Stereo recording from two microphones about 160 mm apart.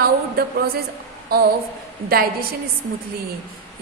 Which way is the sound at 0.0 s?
70° right (ahead or behind).